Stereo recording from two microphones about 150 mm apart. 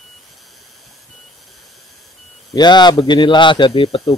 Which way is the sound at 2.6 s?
30° left (ahead or behind).